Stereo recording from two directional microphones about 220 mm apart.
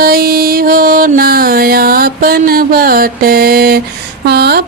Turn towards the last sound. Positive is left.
turn(degrees=-45)  # may be behind; listen again after turning